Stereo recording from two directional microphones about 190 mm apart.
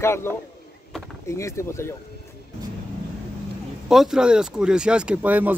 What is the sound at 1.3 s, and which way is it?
Speech, 15° left (ahead or behind).